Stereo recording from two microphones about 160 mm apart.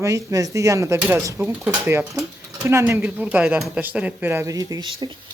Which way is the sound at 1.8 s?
15° right (ahead or behind).